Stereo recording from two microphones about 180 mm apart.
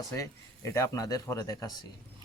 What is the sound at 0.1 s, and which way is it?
Speech, 15° left (ahead or behind).